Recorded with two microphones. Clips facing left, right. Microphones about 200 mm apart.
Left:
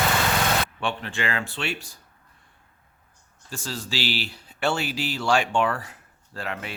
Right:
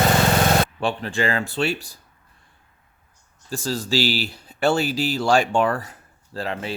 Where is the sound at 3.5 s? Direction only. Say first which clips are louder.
Right 8 dB; 40° right (ahead or behind).